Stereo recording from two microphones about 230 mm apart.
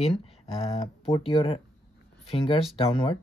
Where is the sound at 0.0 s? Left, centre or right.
Left.